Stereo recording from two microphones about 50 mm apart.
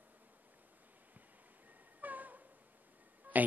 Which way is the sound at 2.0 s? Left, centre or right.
Right.